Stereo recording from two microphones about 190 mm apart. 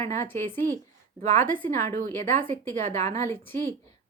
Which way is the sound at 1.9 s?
40° right (ahead or behind).